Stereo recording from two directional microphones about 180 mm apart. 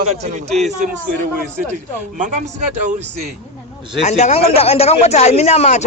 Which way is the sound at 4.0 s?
40° left (ahead or behind).